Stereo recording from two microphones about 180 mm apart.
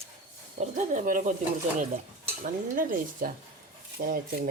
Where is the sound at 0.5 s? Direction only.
45° right (ahead or behind).